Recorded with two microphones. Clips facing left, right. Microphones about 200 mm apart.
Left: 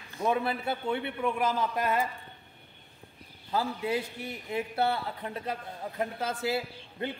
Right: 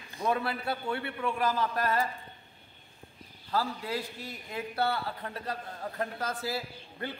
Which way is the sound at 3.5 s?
20° left (ahead or behind).